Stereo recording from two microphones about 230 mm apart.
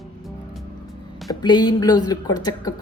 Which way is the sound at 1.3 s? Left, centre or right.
Centre.